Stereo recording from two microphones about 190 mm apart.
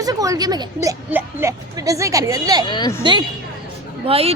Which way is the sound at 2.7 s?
20° left (ahead or behind).